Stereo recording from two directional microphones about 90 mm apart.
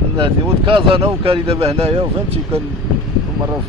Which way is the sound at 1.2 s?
90° right.